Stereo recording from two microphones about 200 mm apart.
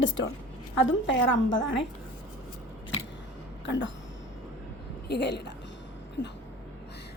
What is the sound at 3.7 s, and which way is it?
Speech, 70° left (ahead or behind).